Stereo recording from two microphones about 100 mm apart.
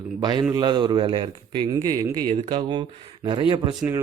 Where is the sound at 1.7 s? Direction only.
40° right (ahead or behind).